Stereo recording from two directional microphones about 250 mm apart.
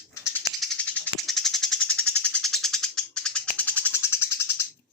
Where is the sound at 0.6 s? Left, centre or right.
Centre.